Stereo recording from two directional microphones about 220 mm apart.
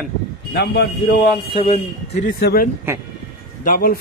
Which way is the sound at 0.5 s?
50° left (ahead or behind).